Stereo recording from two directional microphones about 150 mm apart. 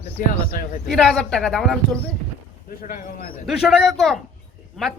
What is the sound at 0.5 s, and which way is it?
Speech, 75° left (ahead or behind).